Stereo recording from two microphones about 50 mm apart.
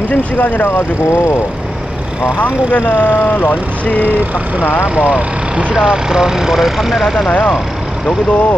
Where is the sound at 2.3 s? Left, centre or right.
Left.